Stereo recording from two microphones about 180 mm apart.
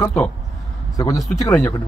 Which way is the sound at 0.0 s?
10° left (ahead or behind).